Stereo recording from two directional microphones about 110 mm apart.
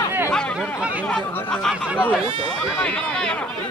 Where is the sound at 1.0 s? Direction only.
10° left (ahead or behind).